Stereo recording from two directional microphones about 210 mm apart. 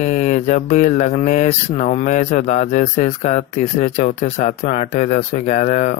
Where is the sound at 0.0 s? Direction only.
35° left (ahead or behind).